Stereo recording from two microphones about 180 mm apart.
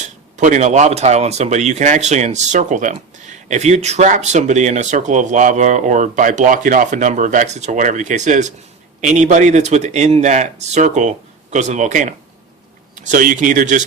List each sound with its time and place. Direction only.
0.3 s speech: 45° right (ahead or behind)